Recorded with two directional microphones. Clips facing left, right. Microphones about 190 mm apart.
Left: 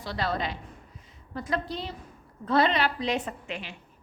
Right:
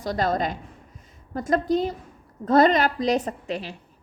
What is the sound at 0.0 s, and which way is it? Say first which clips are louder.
A woman's voice: right 6 dB; 45° right (ahead or behind).